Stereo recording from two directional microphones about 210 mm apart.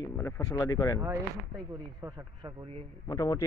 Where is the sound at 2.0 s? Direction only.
20° right (ahead or behind).